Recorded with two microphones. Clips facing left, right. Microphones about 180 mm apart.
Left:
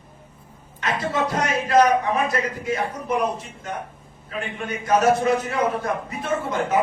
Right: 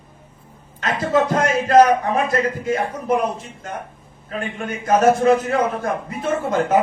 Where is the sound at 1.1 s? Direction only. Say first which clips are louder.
Right 8 dB; 50° right (ahead or behind).